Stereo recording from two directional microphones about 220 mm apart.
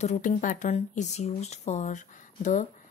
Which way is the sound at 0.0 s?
35° left (ahead or behind).